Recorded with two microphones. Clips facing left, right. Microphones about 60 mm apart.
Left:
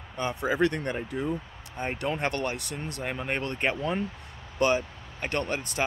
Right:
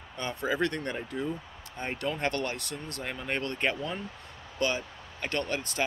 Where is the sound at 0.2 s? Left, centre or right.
Centre.